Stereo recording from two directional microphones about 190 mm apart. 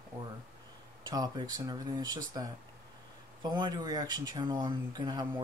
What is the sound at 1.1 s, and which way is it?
Speech, 20° right (ahead or behind).